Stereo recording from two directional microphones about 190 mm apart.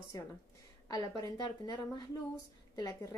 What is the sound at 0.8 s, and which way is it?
A woman's voice, 20° left (ahead or behind).